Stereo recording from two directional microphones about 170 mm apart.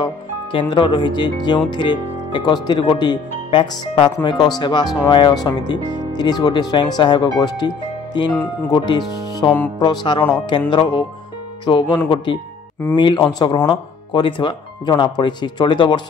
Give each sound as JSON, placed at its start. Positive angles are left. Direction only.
{"t": 0.0, "sound": "speech", "side_deg": 30}